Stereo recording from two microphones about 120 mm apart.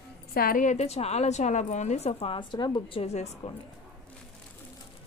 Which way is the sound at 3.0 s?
65° left (ahead or behind).